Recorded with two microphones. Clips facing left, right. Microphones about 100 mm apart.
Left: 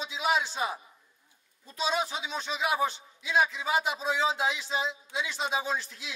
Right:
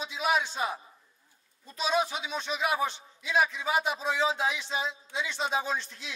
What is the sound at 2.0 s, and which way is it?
Speech, 25° left (ahead or behind).